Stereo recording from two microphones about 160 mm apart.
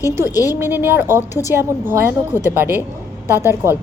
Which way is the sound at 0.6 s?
15° right (ahead or behind).